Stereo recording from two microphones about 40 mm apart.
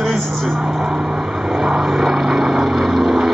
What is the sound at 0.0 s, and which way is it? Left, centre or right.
Vehicle, centre.